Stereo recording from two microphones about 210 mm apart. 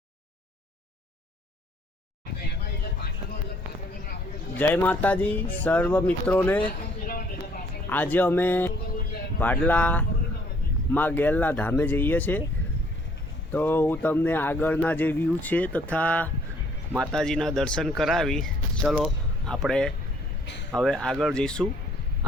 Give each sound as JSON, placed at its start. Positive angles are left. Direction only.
{"t": 4.5, "sound": "speech", "side_deg": 10}
{"t": 6.7, "sound": "a sound", "side_deg": 40}
{"t": 7.9, "sound": "speech", "side_deg": 10}
{"t": 13.5, "sound": "speech", "side_deg": 10}